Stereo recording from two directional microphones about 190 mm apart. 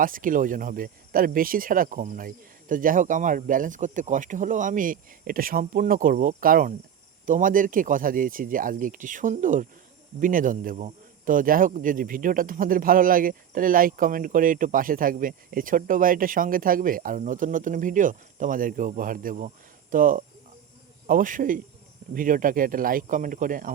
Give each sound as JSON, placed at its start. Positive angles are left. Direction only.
{"t": 0.0, "sound": "a man's voice", "side_deg": -45}